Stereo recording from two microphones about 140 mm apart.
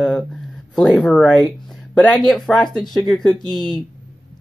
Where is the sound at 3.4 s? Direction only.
30° left (ahead or behind).